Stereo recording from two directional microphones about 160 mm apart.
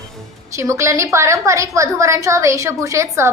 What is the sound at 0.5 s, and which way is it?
A woman's voice, 20° right (ahead or behind).